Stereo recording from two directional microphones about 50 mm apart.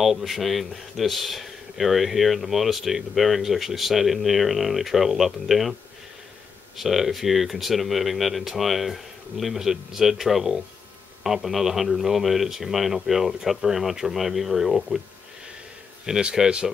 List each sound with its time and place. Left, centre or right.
0.0 s speech: centre
6.8 s speech: centre
16.1 s speech: centre